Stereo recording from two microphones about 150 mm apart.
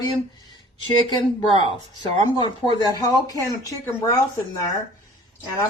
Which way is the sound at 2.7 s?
25° left (ahead or behind).